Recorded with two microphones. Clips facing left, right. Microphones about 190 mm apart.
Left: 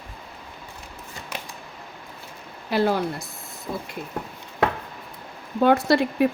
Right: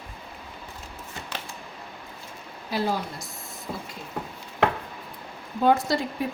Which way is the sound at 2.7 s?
65° left (ahead or behind).